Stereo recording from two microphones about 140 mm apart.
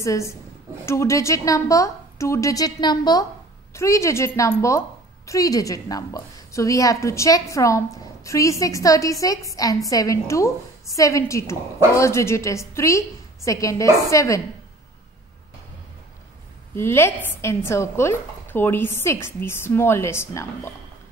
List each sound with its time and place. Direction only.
0.0 s a woman's voice: 20° left (ahead or behind)
16.7 s speech: 15° left (ahead or behind)